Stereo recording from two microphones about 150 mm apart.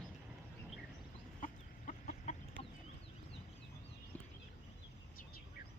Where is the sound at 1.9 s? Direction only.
50° left (ahead or behind).